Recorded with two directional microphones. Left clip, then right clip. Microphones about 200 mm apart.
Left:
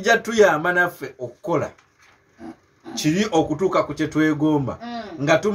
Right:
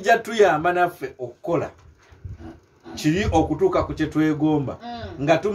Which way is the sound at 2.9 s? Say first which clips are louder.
Left 1 dB; 15° left (ahead or behind).